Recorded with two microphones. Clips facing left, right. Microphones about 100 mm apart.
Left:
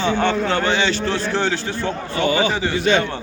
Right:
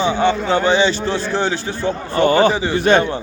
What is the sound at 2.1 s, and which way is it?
Speech, 45° right (ahead or behind).